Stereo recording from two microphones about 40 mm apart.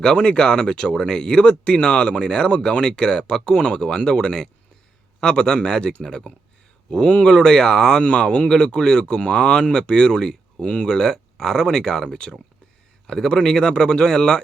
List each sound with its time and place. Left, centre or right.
0.0 s speech: left